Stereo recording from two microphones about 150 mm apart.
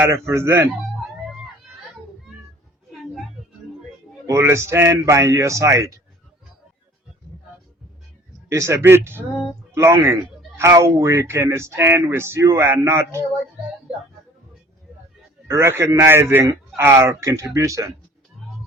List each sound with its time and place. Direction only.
0.1 s speech: 15° right (ahead or behind)
2.9 s music: centre (ahead or behind)
4.3 s a man's voice: 20° right (ahead or behind)
8.4 s speech: 20° right (ahead or behind)
15.4 s a man's voice: 20° right (ahead or behind)